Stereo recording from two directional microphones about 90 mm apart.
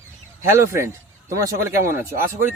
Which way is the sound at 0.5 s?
30° right (ahead or behind).